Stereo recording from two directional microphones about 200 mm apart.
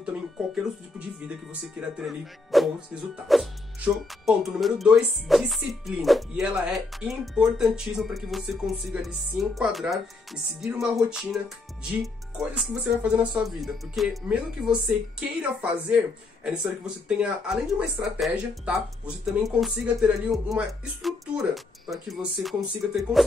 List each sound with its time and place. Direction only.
0.0 s speech: 5° right (ahead or behind)